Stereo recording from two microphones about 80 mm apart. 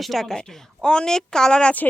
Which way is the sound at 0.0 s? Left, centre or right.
Centre.